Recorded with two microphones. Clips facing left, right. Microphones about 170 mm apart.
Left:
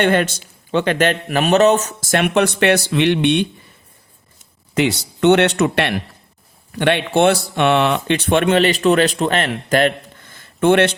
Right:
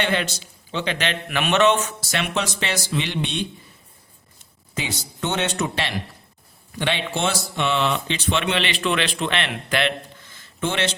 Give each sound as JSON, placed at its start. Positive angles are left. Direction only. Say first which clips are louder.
{"t": 0.0, "sound": "a man's voice", "louder": "left 8 dB", "side_deg": 50}
{"t": 4.7, "sound": "a man's voice", "louder": "left 12 dB", "side_deg": 70}